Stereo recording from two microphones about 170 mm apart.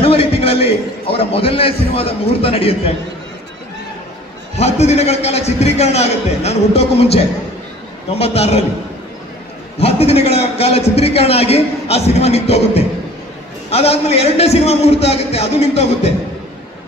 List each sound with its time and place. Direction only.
0.0 s a man's voice: 35° left (ahead or behind)
4.6 s a man's voice: 40° left (ahead or behind)
8.2 s a man's voice: 40° left (ahead or behind)
9.8 s a man's voice: 35° left (ahead or behind)